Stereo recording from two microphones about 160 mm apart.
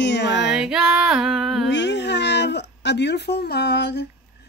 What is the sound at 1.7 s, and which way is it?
Speech, 90° left.